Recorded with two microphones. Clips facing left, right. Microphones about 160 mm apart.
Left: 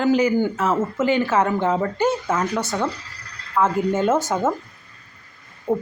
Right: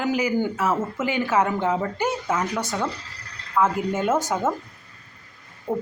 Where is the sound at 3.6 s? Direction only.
25° left (ahead or behind).